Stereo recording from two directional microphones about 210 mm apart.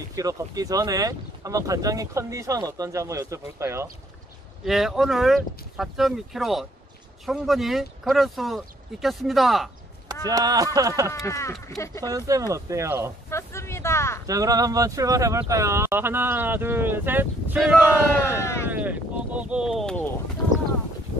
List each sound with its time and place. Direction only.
0.1 s speech: 15° right (ahead or behind)
4.6 s speech: centre (ahead or behind)
10.2 s speech: 20° right (ahead or behind)
11.1 s speech: 15° left (ahead or behind)
12.1 s speech: 15° right (ahead or behind)
13.3 s vehicle: 10° left (ahead or behind)
14.2 s speech: 15° right (ahead or behind)
18.3 s speech: 10° left (ahead or behind)
18.7 s a sound: 5° right (ahead or behind)